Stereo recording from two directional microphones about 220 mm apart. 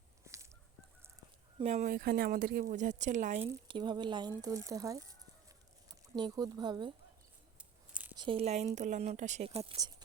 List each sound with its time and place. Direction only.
0.3 s fowl: 15° right (ahead or behind)
1.5 s speech: 30° right (ahead or behind)
3.7 s speech: 20° right (ahead or behind)
7.6 s a sound: 5° right (ahead or behind)
8.1 s speech: 20° right (ahead or behind)